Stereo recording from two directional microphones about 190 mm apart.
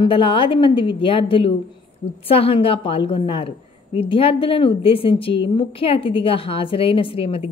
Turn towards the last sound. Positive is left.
turn(degrees=30)  # may be behind; listen again after turning